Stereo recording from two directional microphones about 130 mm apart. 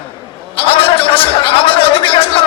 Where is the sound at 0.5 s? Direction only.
45° left (ahead or behind).